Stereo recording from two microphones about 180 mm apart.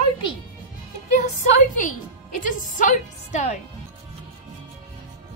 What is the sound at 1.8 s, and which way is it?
A woman's voice, 45° left (ahead or behind).